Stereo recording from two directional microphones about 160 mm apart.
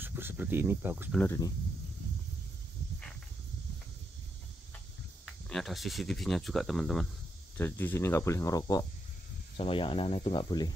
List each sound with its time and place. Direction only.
0.0 s speech: 15° right (ahead or behind)
1.1 s speech: 15° left (ahead or behind)
5.2 s speech: centre (ahead or behind)
7.5 s speech: 15° left (ahead or behind)
9.6 s speech: 35° left (ahead or behind)